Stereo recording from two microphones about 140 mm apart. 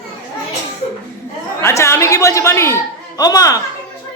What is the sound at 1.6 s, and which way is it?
A woman's voice, 20° left (ahead or behind).